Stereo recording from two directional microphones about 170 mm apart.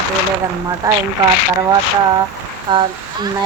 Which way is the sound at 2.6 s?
30° right (ahead or behind).